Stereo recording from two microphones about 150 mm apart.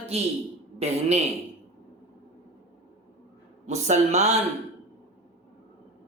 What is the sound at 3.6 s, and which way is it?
Speech, 50° right (ahead or behind).